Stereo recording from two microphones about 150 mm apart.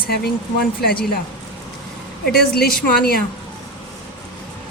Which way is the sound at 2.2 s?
90° left.